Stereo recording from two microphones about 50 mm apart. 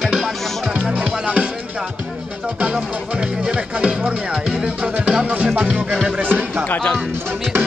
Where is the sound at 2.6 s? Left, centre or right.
Right.